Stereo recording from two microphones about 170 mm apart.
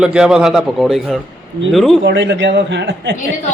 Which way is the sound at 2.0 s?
90° right.